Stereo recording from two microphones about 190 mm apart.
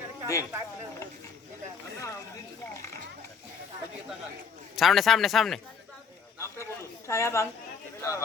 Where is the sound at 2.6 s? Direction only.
15° left (ahead or behind).